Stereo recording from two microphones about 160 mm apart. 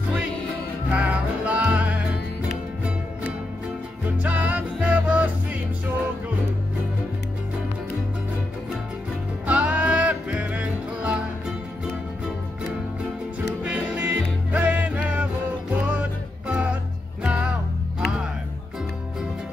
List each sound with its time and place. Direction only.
0.9 s music: 10° right (ahead or behind)
4.2 s music: 10° right (ahead or behind)
9.5 s music: 10° right (ahead or behind)
13.7 s music: 10° right (ahead or behind)